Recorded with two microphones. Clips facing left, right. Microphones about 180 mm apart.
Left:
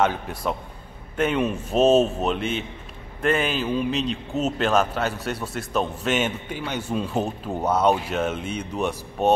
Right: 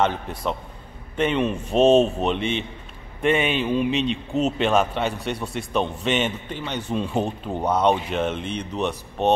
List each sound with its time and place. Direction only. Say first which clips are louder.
0.0 s a man's voice: even; 5° left (ahead or behind)